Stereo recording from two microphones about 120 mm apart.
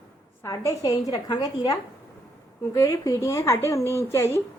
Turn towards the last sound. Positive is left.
turn(degrees=20)  # may be behind; listen again after turning